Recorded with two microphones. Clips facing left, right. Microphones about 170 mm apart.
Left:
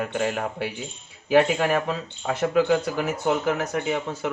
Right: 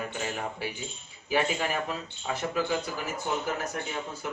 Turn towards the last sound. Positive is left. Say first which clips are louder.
# left 9 dB
turn(degrees=75)  # may be behind; listen again after turning